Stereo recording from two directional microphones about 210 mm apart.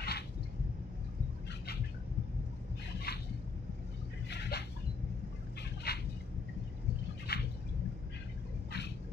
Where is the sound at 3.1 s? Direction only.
50° left (ahead or behind).